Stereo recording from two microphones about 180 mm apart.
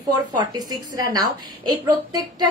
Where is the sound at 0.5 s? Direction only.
20° right (ahead or behind).